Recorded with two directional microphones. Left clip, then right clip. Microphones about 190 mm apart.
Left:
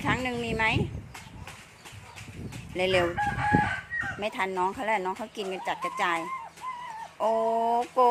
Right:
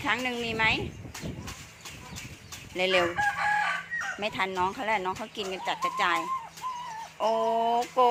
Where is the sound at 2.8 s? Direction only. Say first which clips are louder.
Even; 20° left (ahead or behind).